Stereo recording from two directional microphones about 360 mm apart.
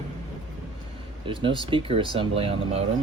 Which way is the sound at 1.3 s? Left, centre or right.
Centre.